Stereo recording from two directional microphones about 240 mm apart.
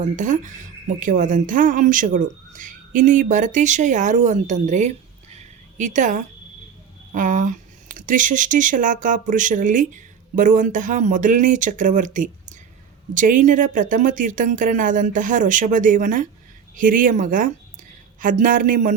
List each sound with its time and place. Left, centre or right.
0.0 s speech: right
5.4 s a sound: right
7.1 s speech: right